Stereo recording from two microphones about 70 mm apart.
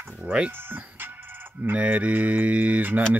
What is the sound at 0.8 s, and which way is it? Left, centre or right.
Music, right.